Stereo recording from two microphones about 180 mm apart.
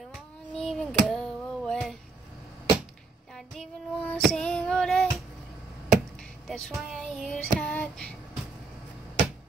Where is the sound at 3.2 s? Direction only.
Centre (ahead or behind).